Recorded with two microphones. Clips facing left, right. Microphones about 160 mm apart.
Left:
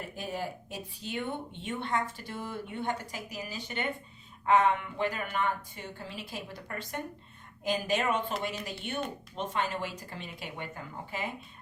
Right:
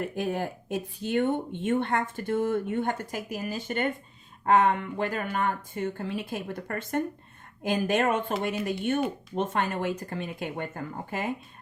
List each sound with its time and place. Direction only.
0.2 s speech: 55° right (ahead or behind)